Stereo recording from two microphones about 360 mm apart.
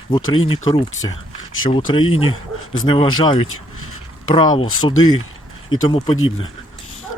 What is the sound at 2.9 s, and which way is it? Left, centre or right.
A man's voice, centre.